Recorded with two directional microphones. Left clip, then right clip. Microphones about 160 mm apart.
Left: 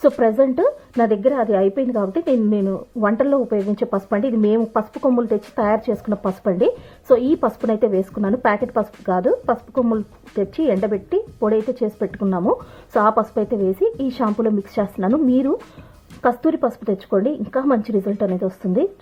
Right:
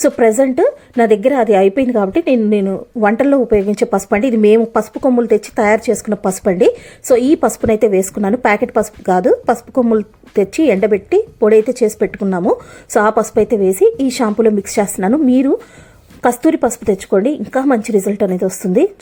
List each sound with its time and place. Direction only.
0.0 s a woman's voice: 20° right (ahead or behind)
6.1 s a woman's voice: 30° right (ahead or behind)
7.1 s a woman's voice: 15° right (ahead or behind)